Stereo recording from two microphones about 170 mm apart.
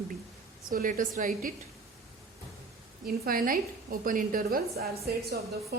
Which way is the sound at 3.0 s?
60° right (ahead or behind).